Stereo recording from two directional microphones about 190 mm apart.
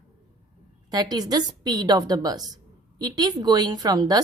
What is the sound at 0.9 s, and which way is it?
A woman's voice, 20° right (ahead or behind).